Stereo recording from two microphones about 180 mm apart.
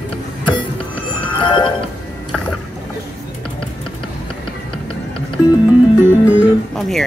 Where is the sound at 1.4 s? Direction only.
25° left (ahead or behind).